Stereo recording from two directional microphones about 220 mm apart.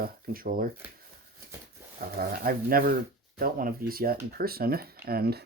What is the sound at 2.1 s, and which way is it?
Speech, 40° right (ahead or behind).